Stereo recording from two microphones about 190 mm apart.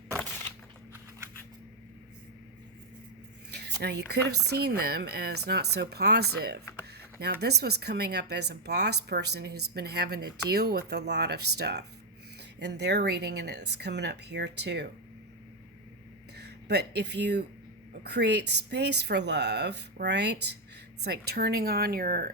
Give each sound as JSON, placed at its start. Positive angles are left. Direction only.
{"t": 3.5, "sound": "a sound", "side_deg": -60}
{"t": 4.4, "sound": "speech", "side_deg": -55}
{"t": 16.4, "sound": "speech", "side_deg": -60}